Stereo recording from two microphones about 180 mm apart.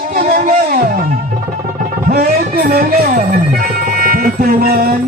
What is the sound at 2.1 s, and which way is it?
Music, 55° right (ahead or behind).